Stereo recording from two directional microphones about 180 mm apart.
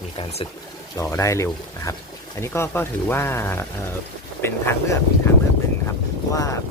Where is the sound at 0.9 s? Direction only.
15° left (ahead or behind).